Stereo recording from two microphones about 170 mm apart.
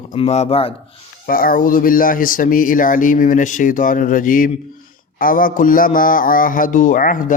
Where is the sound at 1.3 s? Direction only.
55° left (ahead or behind).